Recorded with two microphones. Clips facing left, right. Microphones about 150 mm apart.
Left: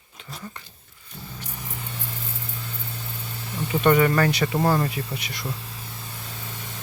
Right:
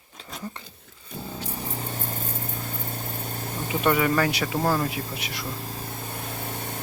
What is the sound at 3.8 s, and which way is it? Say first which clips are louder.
Speech: left 3 dB; 5° right (ahead or behind).